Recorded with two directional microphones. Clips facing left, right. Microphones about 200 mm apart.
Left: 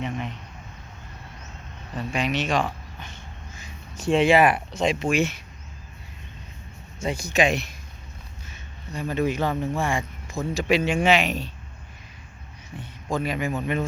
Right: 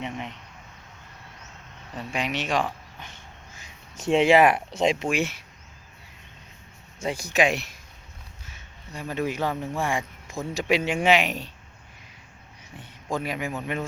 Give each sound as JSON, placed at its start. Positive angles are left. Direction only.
{"t": 2.0, "sound": "speech", "side_deg": -15}
{"t": 5.1, "sound": "speech", "side_deg": -10}
{"t": 7.0, "sound": "speech", "side_deg": -15}
{"t": 12.8, "sound": "speech", "side_deg": -10}